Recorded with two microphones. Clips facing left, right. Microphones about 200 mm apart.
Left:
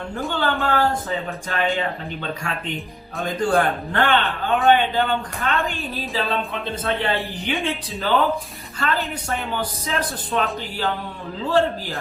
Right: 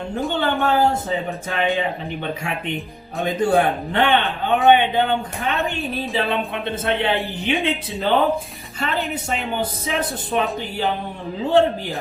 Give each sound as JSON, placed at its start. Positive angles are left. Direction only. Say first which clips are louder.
{"t": 0.3, "sound": "speech", "louder": "right 2 dB", "side_deg": -20}